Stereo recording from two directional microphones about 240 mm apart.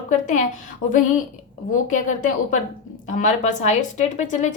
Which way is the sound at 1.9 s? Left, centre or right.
Left.